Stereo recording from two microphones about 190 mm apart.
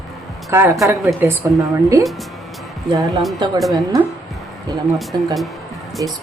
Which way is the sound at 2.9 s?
20° right (ahead or behind).